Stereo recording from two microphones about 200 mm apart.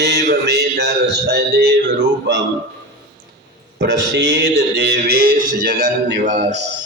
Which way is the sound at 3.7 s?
60° right (ahead or behind).